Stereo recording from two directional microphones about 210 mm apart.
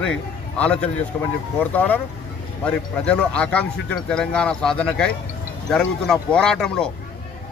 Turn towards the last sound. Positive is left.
turn(degrees=5)  # may be behind; listen again after turning